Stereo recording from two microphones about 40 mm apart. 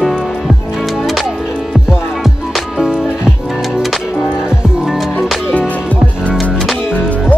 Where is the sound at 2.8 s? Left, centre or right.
Centre.